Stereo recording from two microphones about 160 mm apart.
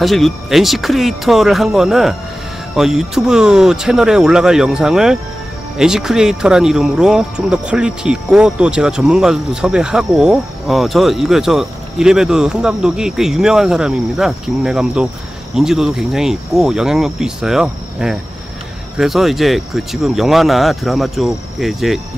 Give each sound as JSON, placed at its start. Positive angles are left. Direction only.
{"t": 0.0, "sound": "speech", "side_deg": 0}